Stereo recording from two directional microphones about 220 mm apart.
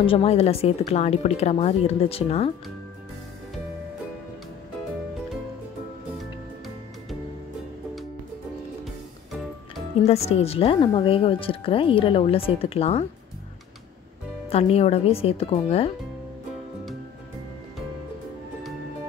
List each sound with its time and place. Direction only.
0.0 s speech: 25° left (ahead or behind)
10.0 s speech: 30° left (ahead or behind)
14.5 s speech: 30° left (ahead or behind)